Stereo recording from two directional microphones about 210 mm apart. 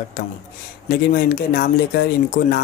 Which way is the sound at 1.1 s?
45° left (ahead or behind).